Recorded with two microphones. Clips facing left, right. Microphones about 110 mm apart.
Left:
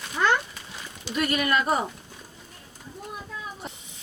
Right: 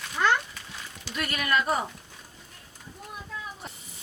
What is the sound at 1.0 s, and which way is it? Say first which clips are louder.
Speech: left 6 dB; 20° left (ahead or behind).